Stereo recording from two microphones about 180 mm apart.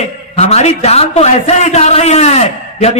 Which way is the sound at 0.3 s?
40° left (ahead or behind).